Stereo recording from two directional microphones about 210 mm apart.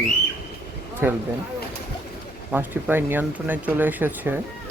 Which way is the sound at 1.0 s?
10° right (ahead or behind).